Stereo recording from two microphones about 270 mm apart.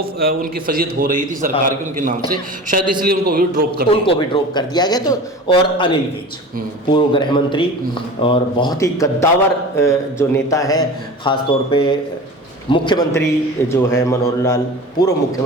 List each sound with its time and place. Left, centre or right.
0.2 s a man's voice: right
3.9 s a man's voice: centre
6.9 s a man's voice: centre